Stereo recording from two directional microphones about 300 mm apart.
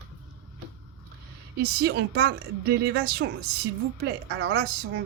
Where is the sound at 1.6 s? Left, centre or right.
Right.